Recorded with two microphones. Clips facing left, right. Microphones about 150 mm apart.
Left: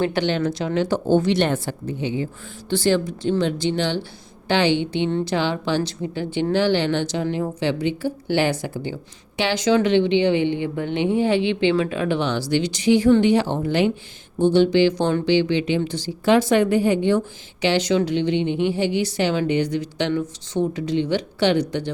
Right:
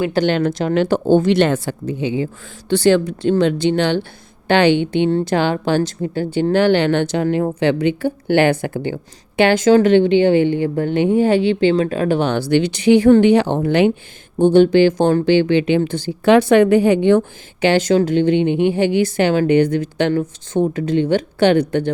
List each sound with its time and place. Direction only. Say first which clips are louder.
0.3 s speech: right 5 dB; 60° right (ahead or behind)
1.0 s speech: right 4 dB; 50° right (ahead or behind)
1.4 s speech: right 5 dB; 90° right
2.7 s speech: right 6 dB; 70° right (ahead or behind)
14.3 s speech: right 5 dB; 50° right (ahead or behind)